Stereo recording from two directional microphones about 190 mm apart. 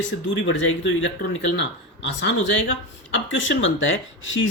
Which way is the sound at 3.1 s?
80° left.